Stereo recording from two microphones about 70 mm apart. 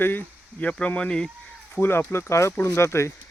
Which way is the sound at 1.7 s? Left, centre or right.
Left.